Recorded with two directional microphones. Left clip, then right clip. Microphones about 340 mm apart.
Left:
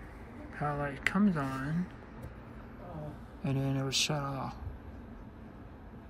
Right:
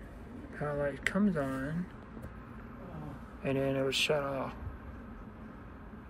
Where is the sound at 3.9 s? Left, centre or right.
Centre.